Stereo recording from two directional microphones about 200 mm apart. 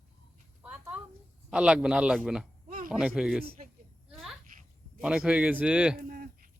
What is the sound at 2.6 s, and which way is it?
Speech, 45° right (ahead or behind).